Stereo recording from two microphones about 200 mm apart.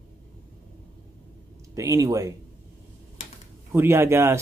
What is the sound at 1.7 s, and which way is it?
Speech, 15° right (ahead or behind).